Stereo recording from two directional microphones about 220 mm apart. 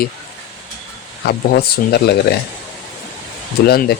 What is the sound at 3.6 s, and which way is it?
Speech, 45° left (ahead or behind).